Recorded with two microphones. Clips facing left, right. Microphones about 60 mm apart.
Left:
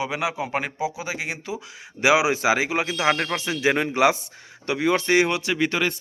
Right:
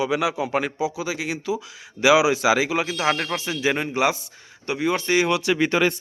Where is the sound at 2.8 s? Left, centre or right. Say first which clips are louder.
Left 1 dB; left.